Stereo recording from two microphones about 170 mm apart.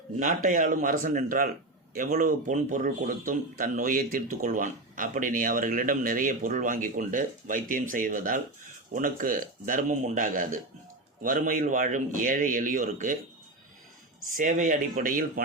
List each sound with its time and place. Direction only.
0.2 s speech: 50° right (ahead or behind)
14.3 s speech: 50° right (ahead or behind)